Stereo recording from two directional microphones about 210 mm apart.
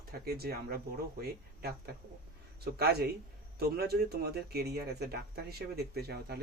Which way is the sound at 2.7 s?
50° right (ahead or behind).